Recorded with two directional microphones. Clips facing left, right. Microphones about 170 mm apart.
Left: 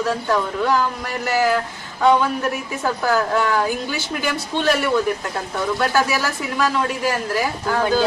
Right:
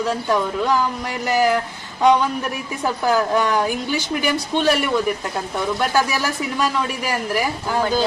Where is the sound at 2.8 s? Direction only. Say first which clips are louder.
Right 1 dB; 15° right (ahead or behind).